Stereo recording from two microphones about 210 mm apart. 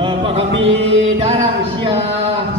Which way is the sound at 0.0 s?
30° right (ahead or behind).